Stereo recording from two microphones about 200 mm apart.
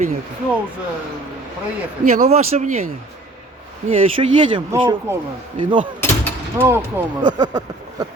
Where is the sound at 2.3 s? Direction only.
30° right (ahead or behind).